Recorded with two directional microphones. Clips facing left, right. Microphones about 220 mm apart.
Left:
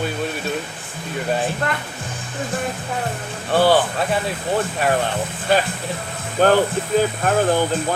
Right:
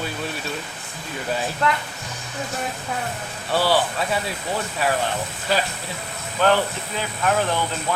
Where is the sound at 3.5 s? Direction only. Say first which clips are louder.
Left 5 dB; 55° left (ahead or behind).